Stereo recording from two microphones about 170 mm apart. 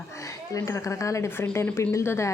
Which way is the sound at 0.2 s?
20° left (ahead or behind).